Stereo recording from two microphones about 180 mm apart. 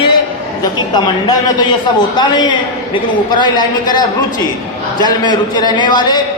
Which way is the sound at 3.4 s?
25° left (ahead or behind).